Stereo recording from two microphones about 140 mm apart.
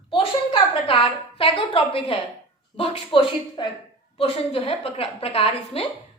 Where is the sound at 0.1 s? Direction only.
40° left (ahead or behind).